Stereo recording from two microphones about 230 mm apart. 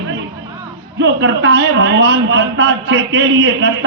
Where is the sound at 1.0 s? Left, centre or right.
Right.